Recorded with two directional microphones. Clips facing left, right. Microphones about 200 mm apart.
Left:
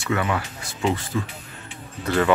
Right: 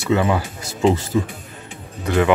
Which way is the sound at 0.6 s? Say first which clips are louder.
Right 7 dB; 40° right (ahead or behind).